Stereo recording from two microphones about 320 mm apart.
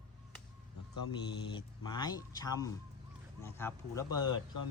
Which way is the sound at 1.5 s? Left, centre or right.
Centre.